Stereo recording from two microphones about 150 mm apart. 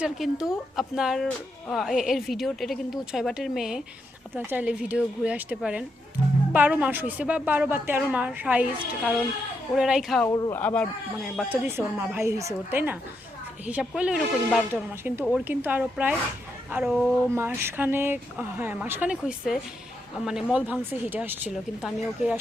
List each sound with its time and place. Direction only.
0.0 s a woman's voice: 5° right (ahead or behind)
10.2 s speech: 25° left (ahead or behind)
10.5 s speech: 10° left (ahead or behind)
11.4 s a woman's voice: 10° right (ahead or behind)
17.3 s a woman's voice: 15° right (ahead or behind)